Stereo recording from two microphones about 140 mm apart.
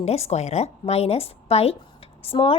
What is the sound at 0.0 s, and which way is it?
A woman's voice, 50° left (ahead or behind).